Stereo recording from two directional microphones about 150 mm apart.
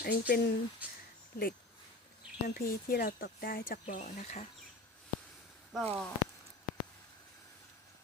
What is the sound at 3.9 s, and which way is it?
Speech, 55° left (ahead or behind).